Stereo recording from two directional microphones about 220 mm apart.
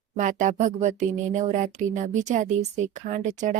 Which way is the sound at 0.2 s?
35° right (ahead or behind).